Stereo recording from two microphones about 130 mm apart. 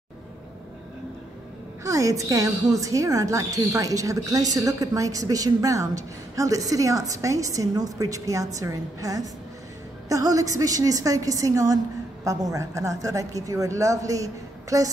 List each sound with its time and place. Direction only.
1.8 s a woman's voice: 25° right (ahead or behind)